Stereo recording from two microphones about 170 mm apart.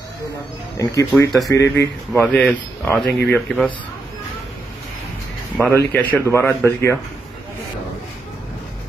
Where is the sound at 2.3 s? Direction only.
5° left (ahead or behind).